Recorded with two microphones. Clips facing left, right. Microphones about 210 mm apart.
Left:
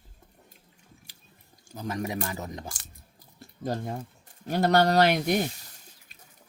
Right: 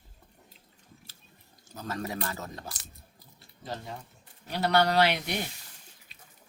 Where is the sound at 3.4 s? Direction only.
50° left (ahead or behind).